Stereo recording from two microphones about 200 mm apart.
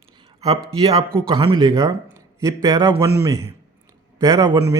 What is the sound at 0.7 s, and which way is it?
A man's voice, 25° right (ahead or behind).